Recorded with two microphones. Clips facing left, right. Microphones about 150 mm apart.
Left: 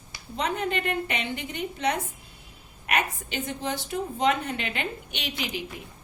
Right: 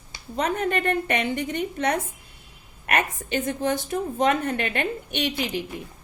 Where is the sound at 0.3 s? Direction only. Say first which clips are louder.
Right 4 dB; 50° right (ahead or behind).